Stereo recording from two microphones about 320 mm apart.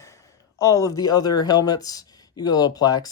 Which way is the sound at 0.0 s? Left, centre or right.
Centre.